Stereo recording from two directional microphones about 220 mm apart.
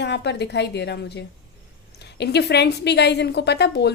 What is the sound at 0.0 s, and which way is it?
A woman's voice, 50° left (ahead or behind).